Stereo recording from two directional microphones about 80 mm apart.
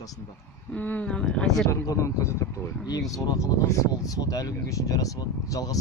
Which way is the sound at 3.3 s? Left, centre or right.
Left.